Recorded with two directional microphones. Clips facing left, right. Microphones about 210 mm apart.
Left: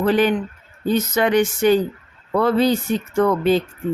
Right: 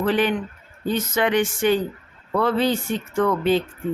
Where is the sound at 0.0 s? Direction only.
40° left (ahead or behind).